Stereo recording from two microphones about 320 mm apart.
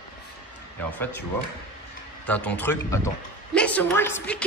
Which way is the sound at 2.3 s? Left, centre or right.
Centre.